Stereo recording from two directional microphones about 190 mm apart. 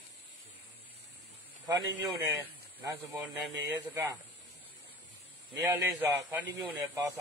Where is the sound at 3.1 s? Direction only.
10° right (ahead or behind).